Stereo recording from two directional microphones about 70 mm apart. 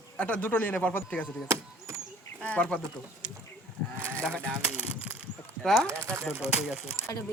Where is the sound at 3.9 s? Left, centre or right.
Right.